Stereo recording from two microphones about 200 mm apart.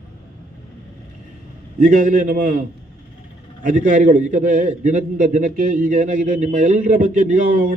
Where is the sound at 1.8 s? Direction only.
40° right (ahead or behind).